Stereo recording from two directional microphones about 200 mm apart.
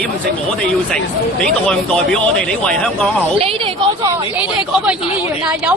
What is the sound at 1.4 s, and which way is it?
Speech, 5° left (ahead or behind).